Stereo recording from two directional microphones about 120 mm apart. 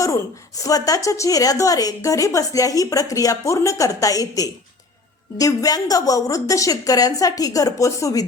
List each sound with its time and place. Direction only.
0.0 s a woman's voice: 30° left (ahead or behind)